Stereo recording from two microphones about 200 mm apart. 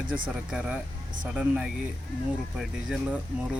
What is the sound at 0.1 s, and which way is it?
Speech, 5° right (ahead or behind).